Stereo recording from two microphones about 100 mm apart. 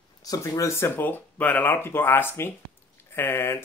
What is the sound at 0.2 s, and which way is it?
Speech, 35° left (ahead or behind).